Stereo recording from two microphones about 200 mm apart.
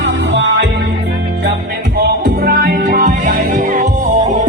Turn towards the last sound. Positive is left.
turn(degrees=-40)  # may be behind; listen again after turning